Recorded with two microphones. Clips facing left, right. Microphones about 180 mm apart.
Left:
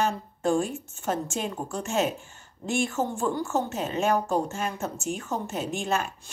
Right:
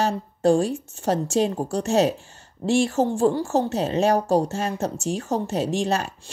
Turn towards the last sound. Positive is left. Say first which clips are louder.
# right 5 dB
turn(degrees=-35)  # may be behind; listen again after turning